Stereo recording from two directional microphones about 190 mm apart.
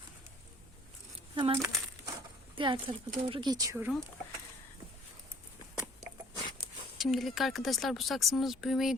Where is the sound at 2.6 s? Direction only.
25° right (ahead or behind).